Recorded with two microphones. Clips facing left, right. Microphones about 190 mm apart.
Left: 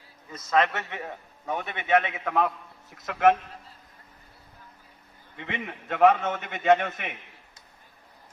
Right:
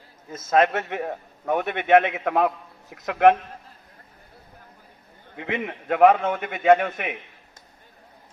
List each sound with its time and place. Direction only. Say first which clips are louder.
0.3 s a man's voice: right 4 dB; 50° right (ahead or behind)
5.3 s a man's voice: right 6 dB; 50° right (ahead or behind)